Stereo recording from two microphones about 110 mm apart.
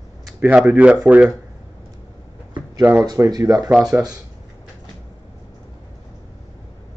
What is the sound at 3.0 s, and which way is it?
Speech, 35° right (ahead or behind).